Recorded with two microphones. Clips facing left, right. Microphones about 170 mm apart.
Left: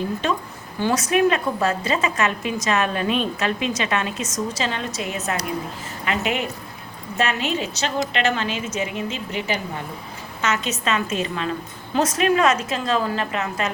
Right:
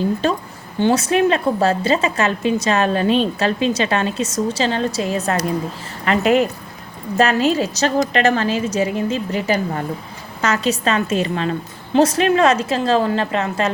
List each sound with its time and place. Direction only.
0.2 s a woman's voice: 35° right (ahead or behind)